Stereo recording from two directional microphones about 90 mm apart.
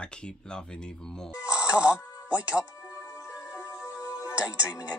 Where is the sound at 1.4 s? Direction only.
10° right (ahead or behind).